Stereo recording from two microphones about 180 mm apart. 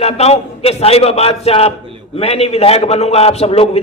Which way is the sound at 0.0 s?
35° left (ahead or behind).